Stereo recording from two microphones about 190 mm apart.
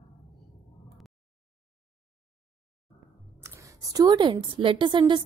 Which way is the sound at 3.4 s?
15° right (ahead or behind).